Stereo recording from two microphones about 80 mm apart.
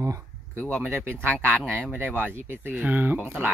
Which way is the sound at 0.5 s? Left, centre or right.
Centre.